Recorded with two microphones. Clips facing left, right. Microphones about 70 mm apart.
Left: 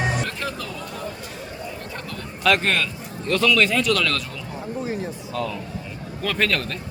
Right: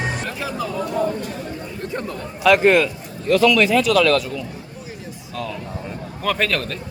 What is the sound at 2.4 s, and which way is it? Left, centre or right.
Speech, centre.